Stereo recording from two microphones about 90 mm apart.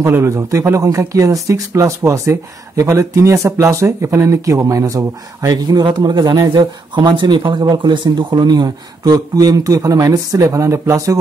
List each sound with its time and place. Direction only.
0.0 s speech: 30° right (ahead or behind)